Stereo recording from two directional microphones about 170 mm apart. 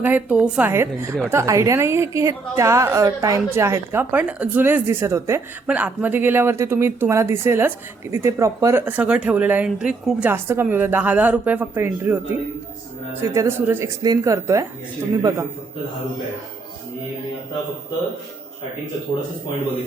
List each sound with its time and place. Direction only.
0.0 s a woman's voice: 10° right (ahead or behind)